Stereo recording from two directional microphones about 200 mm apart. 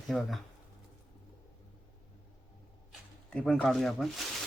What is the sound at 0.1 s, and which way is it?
Speech, centre (ahead or behind).